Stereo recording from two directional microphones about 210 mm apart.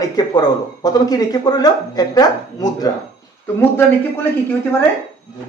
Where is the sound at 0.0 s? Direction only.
20° left (ahead or behind).